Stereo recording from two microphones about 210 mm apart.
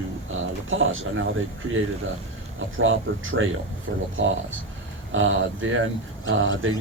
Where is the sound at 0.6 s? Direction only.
65° right (ahead or behind).